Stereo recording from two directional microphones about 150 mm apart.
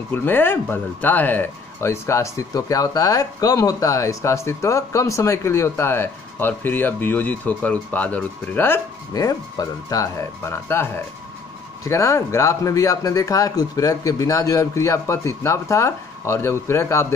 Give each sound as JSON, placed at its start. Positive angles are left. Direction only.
{"t": 0.1, "sound": "speech", "side_deg": 15}